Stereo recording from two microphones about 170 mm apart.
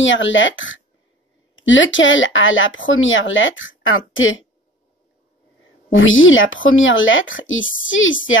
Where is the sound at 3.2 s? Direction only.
90° left.